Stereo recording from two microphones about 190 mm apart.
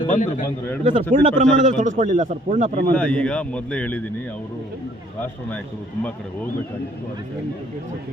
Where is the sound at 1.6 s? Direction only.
40° right (ahead or behind).